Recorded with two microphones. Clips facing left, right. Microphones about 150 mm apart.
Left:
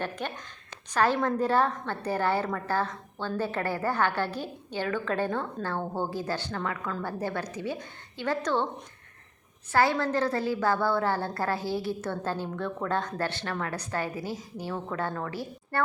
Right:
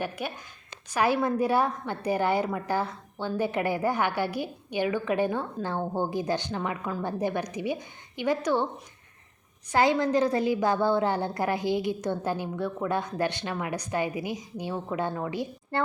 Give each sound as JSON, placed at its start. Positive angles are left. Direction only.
{"t": 0.0, "sound": "a woman's voice", "side_deg": -10}
{"t": 9.7, "sound": "a woman's voice", "side_deg": -15}